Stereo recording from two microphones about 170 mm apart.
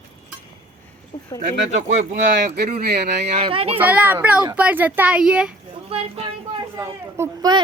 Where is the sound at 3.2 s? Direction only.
35° right (ahead or behind).